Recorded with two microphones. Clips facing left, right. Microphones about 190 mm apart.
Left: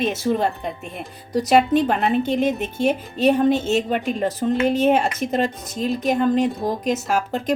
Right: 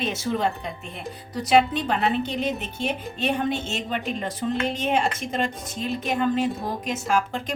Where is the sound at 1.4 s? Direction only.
45° left (ahead or behind).